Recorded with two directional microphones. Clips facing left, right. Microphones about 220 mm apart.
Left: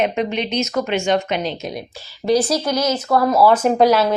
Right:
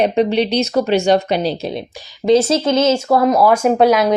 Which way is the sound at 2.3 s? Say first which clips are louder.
Right 4 dB; 25° right (ahead or behind).